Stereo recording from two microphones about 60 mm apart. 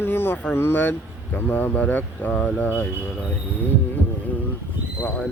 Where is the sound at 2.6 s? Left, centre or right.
Left.